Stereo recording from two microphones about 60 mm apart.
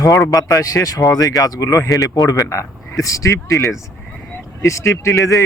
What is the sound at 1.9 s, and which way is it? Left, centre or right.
Speech, left.